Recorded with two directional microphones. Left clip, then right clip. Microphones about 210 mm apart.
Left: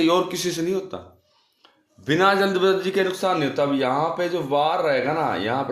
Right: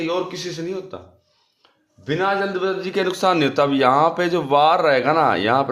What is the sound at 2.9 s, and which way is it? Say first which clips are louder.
Speech: right 3 dB; 20° right (ahead or behind).